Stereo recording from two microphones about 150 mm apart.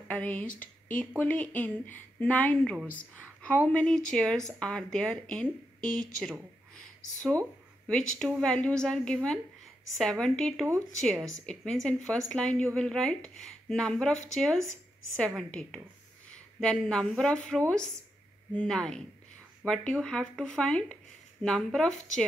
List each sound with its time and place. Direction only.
0.1 s a woman's voice: 10° left (ahead or behind)
8.4 s speech: 5° left (ahead or behind)
11.1 s speech: 20° right (ahead or behind)
11.4 s speech: 5° left (ahead or behind)